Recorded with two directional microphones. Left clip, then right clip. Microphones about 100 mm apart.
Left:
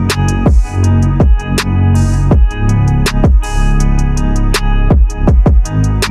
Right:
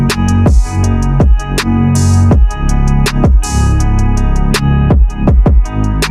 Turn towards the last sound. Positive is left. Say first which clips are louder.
# right 1 dB
turn(degrees=0)  # may be behind; listen again after turning